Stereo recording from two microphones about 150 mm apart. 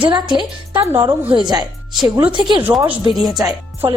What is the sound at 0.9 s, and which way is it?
Speech, 15° right (ahead or behind).